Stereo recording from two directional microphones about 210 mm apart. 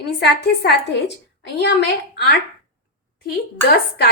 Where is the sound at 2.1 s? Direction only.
50° left (ahead or behind).